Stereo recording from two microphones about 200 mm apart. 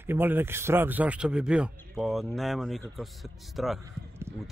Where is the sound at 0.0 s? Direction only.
10° right (ahead or behind).